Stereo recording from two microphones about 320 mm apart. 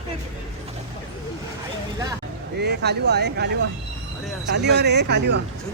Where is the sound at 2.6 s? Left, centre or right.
Right.